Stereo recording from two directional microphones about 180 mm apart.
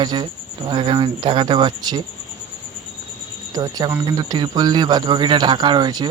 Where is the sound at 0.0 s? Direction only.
25° right (ahead or behind).